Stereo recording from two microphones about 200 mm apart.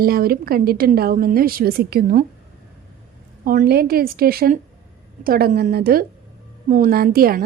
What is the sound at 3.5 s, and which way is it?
A woman's voice, 50° right (ahead or behind).